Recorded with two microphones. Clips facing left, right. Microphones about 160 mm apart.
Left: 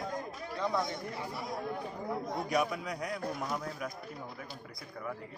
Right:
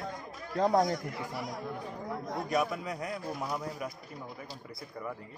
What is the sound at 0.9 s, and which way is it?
Speech, 25° left (ahead or behind).